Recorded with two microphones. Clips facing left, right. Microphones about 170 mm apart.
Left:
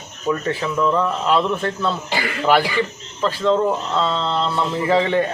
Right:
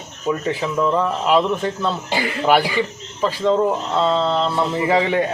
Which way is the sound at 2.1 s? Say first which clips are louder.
Right 2 dB; 25° right (ahead or behind).